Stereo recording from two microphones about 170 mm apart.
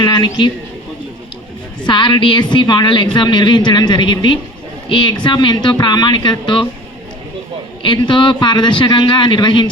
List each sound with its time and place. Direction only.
0.0 s a woman's voice: 25° left (ahead or behind)
1.8 s a woman's voice: 25° left (ahead or behind)
7.8 s a woman's voice: 30° left (ahead or behind)